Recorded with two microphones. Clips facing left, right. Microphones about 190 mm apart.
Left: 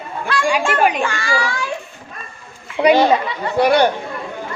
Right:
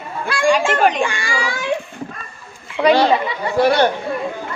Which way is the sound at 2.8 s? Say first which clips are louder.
Left 1 dB; 15° left (ahead or behind).